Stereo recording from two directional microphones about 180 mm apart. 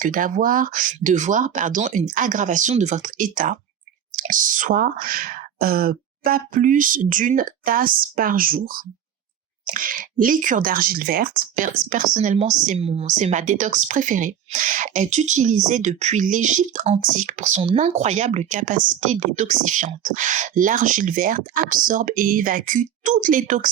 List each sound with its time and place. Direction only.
0.0 s speech: 50° right (ahead or behind)